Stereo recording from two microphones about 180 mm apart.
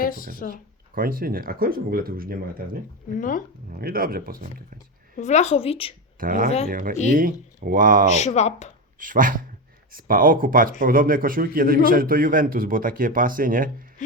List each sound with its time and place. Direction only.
0.0 s speech: 50° left (ahead or behind)
0.5 s a man's voice: 55° right (ahead or behind)
3.2 s speech: 50° left (ahead or behind)
3.7 s a man's voice: 55° right (ahead or behind)
5.1 s a woman's voice: 40° left (ahead or behind)
6.1 s a man's voice: 50° right (ahead or behind)
8.1 s a woman's voice: 40° left (ahead or behind)
9.0 s a man's voice: 50° right (ahead or behind)